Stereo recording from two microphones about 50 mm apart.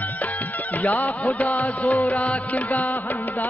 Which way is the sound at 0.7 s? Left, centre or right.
Left.